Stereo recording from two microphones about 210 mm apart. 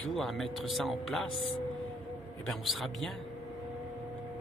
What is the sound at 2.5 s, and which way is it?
Speech, centre (ahead or behind).